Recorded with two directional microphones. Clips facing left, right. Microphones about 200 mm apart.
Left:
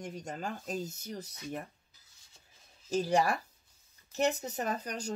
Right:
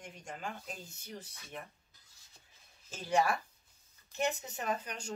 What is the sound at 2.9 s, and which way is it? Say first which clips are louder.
Speech: left 3 dB; 40° left (ahead or behind).